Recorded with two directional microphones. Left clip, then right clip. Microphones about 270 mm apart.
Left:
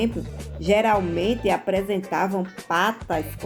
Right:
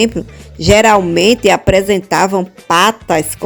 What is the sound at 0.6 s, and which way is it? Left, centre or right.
Speech, right.